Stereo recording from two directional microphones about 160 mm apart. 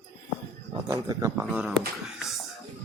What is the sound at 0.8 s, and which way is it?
Speech, 20° right (ahead or behind).